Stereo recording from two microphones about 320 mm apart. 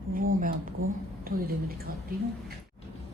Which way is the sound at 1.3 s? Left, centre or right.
Right.